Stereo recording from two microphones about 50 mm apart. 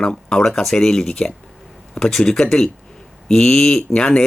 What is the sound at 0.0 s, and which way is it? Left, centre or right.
Speech, centre.